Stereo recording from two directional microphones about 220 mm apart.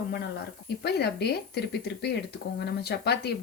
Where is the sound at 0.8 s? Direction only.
50° left (ahead or behind).